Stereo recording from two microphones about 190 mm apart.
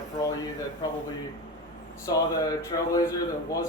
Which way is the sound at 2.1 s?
20° left (ahead or behind).